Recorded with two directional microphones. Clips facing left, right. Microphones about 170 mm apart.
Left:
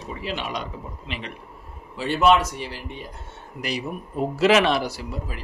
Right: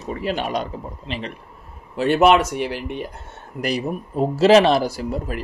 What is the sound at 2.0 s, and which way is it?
Speech, 60° right (ahead or behind).